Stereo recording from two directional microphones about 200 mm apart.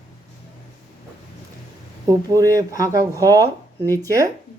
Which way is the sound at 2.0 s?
15° right (ahead or behind).